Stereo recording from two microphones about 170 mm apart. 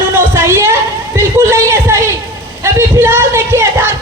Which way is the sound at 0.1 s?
15° right (ahead or behind).